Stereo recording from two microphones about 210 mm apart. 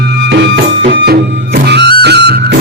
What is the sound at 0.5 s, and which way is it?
Music, 50° right (ahead or behind).